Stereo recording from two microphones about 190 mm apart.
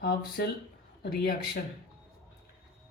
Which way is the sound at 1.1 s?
50° left (ahead or behind).